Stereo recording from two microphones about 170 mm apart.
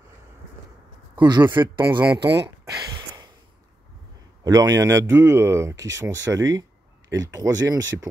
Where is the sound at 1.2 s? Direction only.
25° right (ahead or behind).